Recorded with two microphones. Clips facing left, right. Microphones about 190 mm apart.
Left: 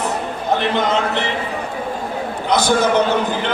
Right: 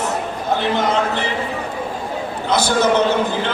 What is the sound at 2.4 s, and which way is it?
Speech, 15° left (ahead or behind).